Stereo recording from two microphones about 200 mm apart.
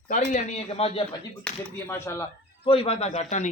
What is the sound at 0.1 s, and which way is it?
Speech, 35° left (ahead or behind).